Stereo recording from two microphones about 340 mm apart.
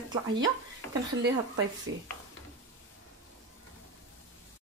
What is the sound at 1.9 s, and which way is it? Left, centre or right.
Speech, right.